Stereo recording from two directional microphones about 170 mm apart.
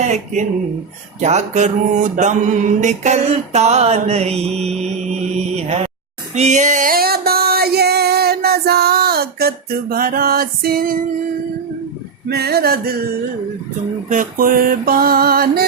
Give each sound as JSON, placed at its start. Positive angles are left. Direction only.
{"t": 0.0, "sound": "speech", "side_deg": -45}
{"t": 1.2, "sound": "mantra", "side_deg": -45}
{"t": 6.3, "sound": "a sound", "side_deg": -45}
{"t": 12.3, "sound": "mantra", "side_deg": -70}
{"t": 14.1, "sound": "mantra", "side_deg": -50}